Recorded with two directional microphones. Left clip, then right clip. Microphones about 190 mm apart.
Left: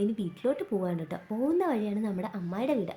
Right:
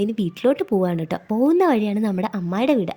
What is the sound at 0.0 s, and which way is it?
Speech, 45° right (ahead or behind).